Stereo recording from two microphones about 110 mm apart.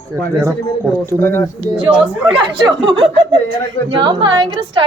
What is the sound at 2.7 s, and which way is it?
A woman's voice, 45° right (ahead or behind).